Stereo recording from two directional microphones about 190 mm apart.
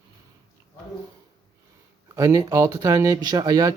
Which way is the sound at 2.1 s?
15° right (ahead or behind).